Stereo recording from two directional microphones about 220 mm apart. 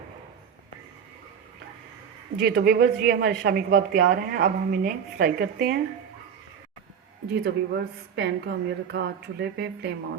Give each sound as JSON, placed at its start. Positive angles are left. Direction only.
{"t": 2.4, "sound": "a woman's voice", "side_deg": -45}
{"t": 7.4, "sound": "a woman's voice", "side_deg": -50}